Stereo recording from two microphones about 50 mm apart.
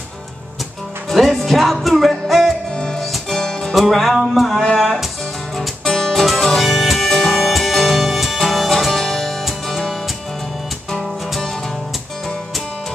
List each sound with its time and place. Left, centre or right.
1.1 s music: centre
2.7 s music: centre
3.0 s music: centre
3.7 s music: centre
4.7 s speech: centre
5.6 s music: centre